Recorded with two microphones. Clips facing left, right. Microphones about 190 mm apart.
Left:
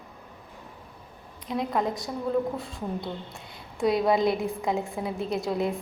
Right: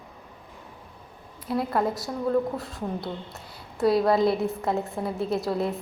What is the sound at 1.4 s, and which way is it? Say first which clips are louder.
A woman's voice: right 2 dB; 5° right (ahead or behind).